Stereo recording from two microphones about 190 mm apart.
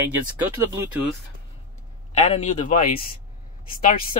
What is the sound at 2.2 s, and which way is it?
Speech, 35° left (ahead or behind).